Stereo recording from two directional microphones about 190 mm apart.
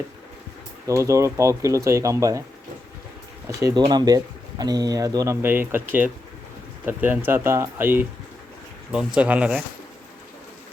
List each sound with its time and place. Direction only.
0.9 s speech: 15° right (ahead or behind)
3.6 s speech: 20° right (ahead or behind)